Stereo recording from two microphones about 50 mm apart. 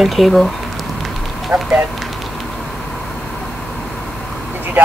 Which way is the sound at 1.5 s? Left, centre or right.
Right.